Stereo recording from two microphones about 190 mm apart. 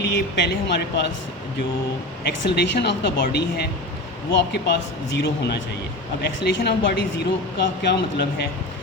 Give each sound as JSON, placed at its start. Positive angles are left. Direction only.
{"t": 0.0, "sound": "speech", "side_deg": 65}
{"t": 2.2, "sound": "speech", "side_deg": 60}